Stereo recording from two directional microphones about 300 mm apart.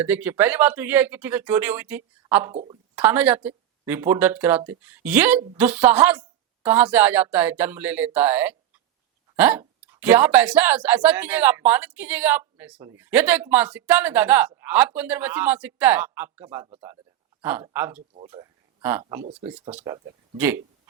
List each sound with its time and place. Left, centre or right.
0.0 s speech: centre
2.5 s speech: centre
2.9 s speech: centre